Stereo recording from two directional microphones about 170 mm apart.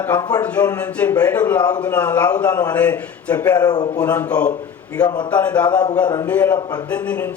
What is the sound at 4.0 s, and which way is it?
Speech, 10° left (ahead or behind).